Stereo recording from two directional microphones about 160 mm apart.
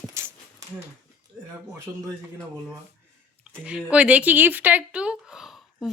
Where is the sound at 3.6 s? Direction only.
10° right (ahead or behind).